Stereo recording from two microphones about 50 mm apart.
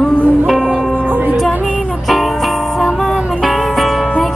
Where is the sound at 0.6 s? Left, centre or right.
Right.